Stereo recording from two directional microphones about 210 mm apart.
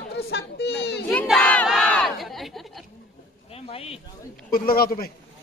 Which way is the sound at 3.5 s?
30° left (ahead or behind).